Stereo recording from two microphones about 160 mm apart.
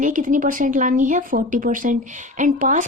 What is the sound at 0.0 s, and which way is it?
A woman's voice, 55° right (ahead or behind).